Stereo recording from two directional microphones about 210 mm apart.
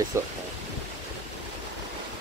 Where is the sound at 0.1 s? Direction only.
15° right (ahead or behind).